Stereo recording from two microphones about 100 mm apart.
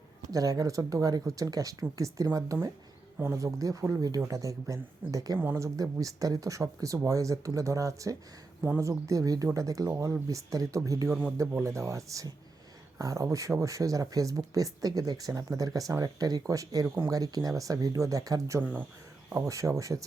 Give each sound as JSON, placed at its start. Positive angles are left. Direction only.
{"t": 0.2, "sound": "speech", "side_deg": -35}
{"t": 18.6, "sound": "speech", "side_deg": -20}
{"t": 19.3, "sound": "speech", "side_deg": -30}